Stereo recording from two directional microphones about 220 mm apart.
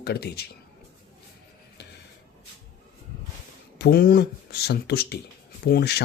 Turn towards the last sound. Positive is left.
turn(degrees=45)  # may be behind; listen again after turning